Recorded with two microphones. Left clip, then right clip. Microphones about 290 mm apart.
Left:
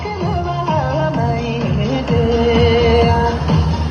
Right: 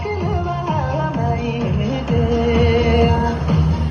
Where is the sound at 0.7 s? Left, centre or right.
Left.